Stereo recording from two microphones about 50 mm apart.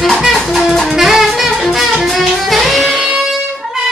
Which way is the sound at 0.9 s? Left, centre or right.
Centre.